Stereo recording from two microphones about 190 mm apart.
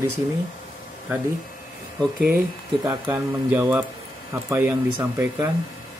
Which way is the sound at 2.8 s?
10° right (ahead or behind).